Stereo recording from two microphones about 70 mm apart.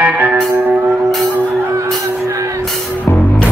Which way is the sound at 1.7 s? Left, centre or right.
Right.